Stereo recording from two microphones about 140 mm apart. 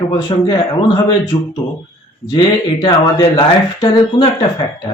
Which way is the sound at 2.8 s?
40° left (ahead or behind).